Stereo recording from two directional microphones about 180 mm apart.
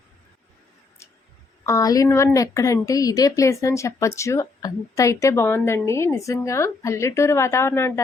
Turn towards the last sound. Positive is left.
turn(degrees=15)  # may be behind; listen again after turning